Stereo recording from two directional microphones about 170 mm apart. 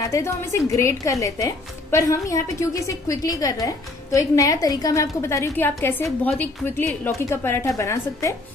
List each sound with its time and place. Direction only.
0.0 s a woman's voice: 15° left (ahead or behind)